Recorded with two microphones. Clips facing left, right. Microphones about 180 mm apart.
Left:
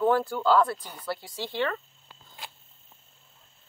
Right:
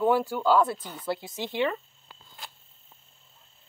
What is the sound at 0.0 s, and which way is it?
Speech, 15° right (ahead or behind).